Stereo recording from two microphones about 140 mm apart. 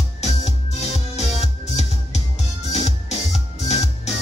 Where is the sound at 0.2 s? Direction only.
50° left (ahead or behind).